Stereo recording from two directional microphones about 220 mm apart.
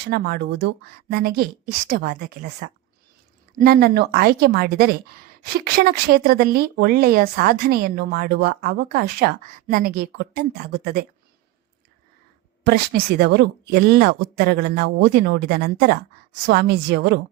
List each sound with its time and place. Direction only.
0.1 s speech: 50° right (ahead or behind)
12.6 s speech: 45° right (ahead or behind)